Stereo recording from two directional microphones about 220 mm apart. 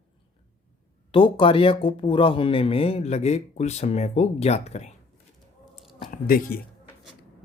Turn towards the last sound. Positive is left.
turn(degrees=40)  # may be behind; listen again after turning